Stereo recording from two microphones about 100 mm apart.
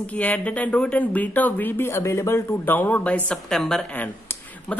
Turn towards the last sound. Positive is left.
turn(degrees=15)  # may be behind; listen again after turning